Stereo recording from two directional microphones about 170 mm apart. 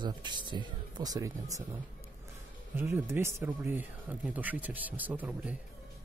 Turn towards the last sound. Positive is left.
turn(degrees=-10)  # may be behind; listen again after turning